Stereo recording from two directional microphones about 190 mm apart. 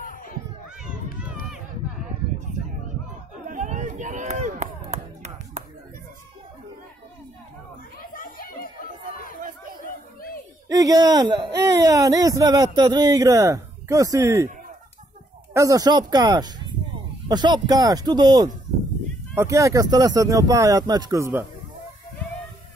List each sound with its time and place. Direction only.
0.0 s children playing: 45° left (ahead or behind)
3.4 s chop: 40° right (ahead or behind)
8.1 s a sound: 50° left (ahead or behind)
9.4 s chatter: 45° right (ahead or behind)
9.8 s a sound: 50° left (ahead or behind)
10.7 s speech: 20° right (ahead or behind)
15.5 s speech: 15° right (ahead or behind)